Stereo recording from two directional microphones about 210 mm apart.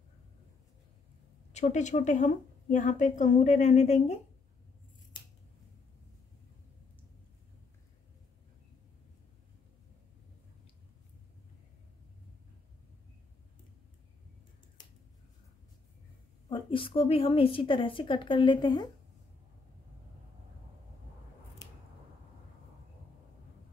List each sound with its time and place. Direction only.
1.5 s a woman's voice: 35° left (ahead or behind)
16.4 s a woman's voice: 25° left (ahead or behind)